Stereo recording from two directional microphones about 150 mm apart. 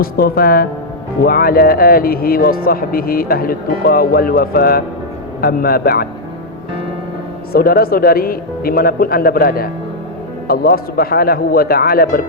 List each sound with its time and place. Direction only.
0.0 s speech: 80° left
7.5 s speech: 85° left